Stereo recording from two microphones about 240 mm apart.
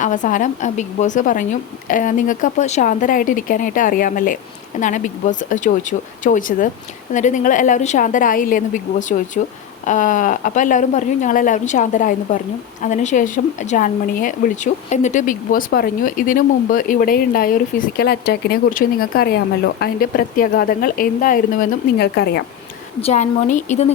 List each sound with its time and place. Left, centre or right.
0.0 s a woman's voice: left
23.0 s speech: left